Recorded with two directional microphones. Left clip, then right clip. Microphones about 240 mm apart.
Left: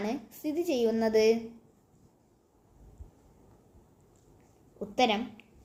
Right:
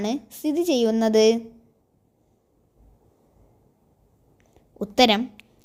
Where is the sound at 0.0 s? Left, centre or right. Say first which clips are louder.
Right 7 dB; right.